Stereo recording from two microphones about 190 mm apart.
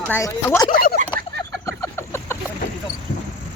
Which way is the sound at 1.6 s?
15° left (ahead or behind).